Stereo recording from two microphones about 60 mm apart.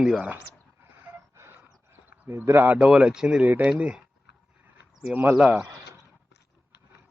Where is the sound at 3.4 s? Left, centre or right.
Right.